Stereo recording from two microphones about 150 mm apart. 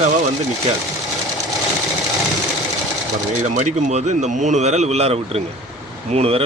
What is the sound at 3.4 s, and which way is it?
Speech, 50° right (ahead or behind).